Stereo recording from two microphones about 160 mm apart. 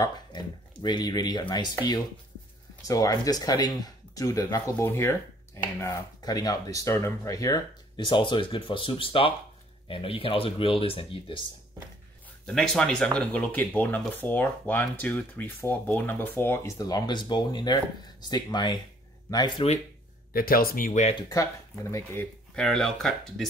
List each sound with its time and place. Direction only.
0.3 s speech: 30° left (ahead or behind)
2.8 s speech: 20° left (ahead or behind)
12.4 s speech: 5° left (ahead or behind); by 19.6 s 25° left (ahead or behind)
20.3 s speech: 65° left (ahead or behind)
21.1 s speech: 25° left (ahead or behind)
22.6 s speech: centre (ahead or behind)